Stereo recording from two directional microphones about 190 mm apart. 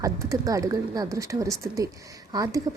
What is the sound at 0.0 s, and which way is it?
Speech, 20° right (ahead or behind).